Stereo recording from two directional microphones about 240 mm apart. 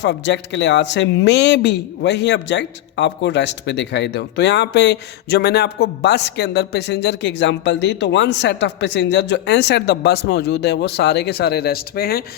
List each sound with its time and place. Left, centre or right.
0.0 s speech: left